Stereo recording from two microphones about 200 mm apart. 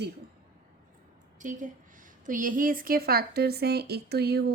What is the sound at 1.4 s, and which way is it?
A woman's voice, 40° right (ahead or behind).